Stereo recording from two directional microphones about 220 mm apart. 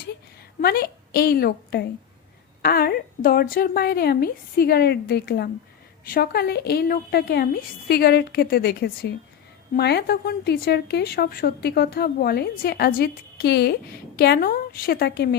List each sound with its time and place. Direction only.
0.6 s a woman's voice: 45° left (ahead or behind)